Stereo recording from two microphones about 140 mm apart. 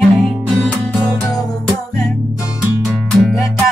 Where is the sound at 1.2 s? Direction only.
25° left (ahead or behind).